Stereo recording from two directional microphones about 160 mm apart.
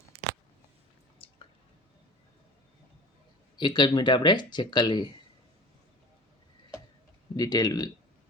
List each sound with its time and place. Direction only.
3.6 s speech: 25° left (ahead or behind)
7.3 s speech: 25° left (ahead or behind)